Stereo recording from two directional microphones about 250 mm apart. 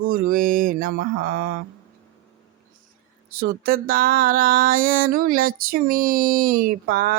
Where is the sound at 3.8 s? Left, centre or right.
Right.